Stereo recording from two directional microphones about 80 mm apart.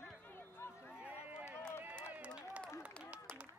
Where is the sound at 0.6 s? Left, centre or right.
Left.